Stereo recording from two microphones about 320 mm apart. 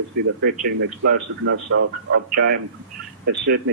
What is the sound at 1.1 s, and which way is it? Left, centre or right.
A man's voice, right.